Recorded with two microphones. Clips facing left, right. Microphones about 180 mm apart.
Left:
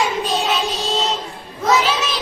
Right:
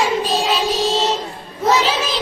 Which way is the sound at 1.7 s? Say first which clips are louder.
Right 1 dB; 30° right (ahead or behind).